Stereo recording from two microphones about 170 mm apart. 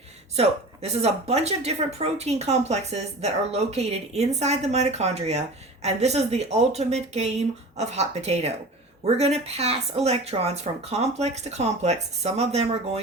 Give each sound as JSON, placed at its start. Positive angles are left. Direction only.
{"t": 0.3, "sound": "speech", "side_deg": -40}